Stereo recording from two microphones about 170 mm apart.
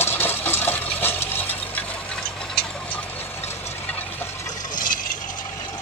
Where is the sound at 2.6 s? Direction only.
65° left (ahead or behind).